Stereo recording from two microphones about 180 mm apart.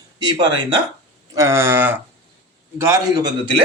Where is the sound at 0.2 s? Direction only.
25° right (ahead or behind).